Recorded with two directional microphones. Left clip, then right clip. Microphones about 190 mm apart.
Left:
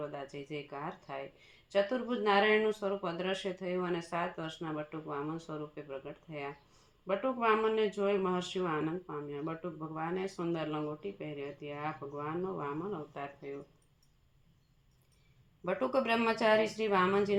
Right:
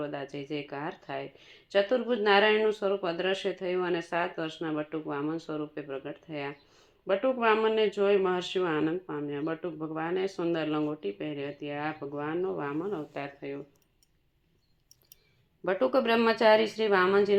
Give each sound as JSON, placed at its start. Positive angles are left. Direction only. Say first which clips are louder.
{"t": 0.0, "sound": "speech", "louder": "right 5 dB", "side_deg": -25}
{"t": 15.6, "sound": "speech", "louder": "right 6 dB", "side_deg": -20}